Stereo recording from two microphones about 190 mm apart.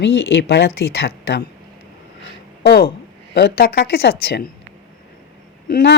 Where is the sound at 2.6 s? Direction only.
55° left (ahead or behind).